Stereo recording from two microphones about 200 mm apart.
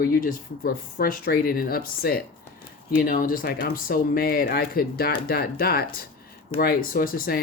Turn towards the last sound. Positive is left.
turn(degrees=45)  # may be behind; listen again after turning